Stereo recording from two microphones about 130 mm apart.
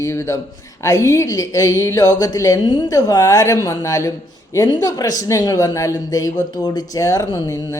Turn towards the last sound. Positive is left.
turn(degrees=25)  # may be behind; listen again after turning